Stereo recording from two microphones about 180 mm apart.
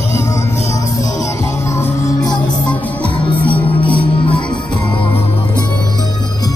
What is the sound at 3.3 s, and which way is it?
Music, 10° left (ahead or behind).